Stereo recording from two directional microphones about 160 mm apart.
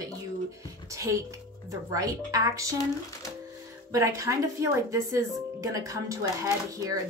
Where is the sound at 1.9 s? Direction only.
20° right (ahead or behind).